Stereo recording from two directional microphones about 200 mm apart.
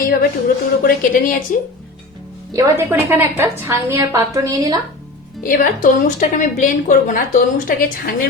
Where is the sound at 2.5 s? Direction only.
15° right (ahead or behind).